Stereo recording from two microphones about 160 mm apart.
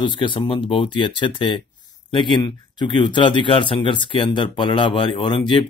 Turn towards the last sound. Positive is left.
turn(degrees=30)  # may be behind; listen again after turning